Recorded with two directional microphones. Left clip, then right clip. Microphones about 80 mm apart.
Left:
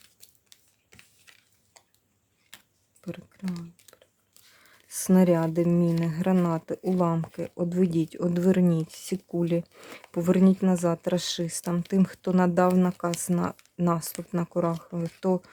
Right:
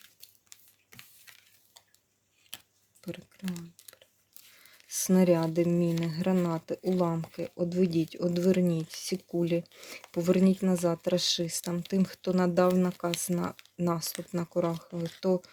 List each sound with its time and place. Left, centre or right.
1.3 s a sound: centre
3.0 s speech: left
3.9 s biting: left
4.6 s a sound: left
5.2 s speech: centre
5.5 s speech: left
6.3 s speech: left
9.3 s speech: left
9.6 s speech: left